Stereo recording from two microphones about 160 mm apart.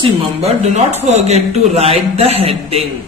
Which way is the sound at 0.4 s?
40° right (ahead or behind).